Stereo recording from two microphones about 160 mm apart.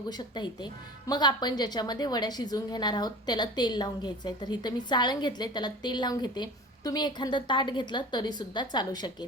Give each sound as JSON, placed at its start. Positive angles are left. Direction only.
{"t": 0.1, "sound": "speech", "side_deg": 25}